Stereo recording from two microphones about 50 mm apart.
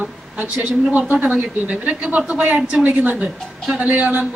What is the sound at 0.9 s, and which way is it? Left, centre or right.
A woman's voice, right.